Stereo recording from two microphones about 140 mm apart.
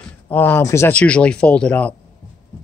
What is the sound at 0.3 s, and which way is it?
Speech, 15° left (ahead or behind).